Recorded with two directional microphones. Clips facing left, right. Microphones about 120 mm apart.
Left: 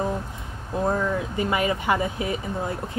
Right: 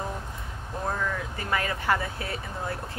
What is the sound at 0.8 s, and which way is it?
Speech, 20° left (ahead or behind).